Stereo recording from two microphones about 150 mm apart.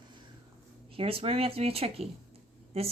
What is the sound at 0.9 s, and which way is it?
A woman's voice, 40° right (ahead or behind).